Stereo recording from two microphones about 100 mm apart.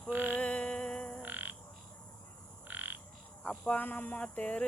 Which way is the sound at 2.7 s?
20° right (ahead or behind).